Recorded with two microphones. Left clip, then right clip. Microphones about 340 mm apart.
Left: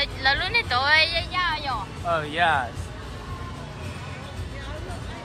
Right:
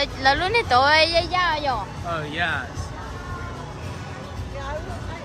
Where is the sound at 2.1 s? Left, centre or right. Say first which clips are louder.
Left 4 dB; centre.